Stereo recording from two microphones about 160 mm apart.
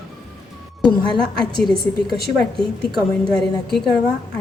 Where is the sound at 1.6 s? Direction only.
Centre (ahead or behind).